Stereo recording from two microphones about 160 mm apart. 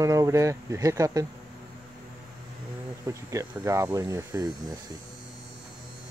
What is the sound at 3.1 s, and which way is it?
Speech, 20° right (ahead or behind).